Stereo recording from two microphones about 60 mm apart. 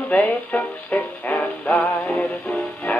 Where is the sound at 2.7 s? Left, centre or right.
Left.